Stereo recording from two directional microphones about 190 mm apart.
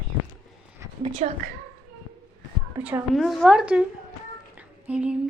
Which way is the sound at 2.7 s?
10° right (ahead or behind).